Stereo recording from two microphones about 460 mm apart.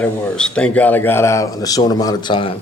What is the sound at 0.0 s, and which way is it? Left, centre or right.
Speech, centre.